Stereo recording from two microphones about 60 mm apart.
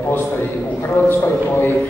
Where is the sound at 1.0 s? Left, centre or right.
Left.